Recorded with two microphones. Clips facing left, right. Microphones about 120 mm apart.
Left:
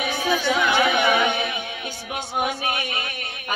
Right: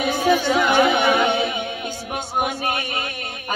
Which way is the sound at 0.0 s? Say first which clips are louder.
Right 4 dB; 40° right (ahead or behind).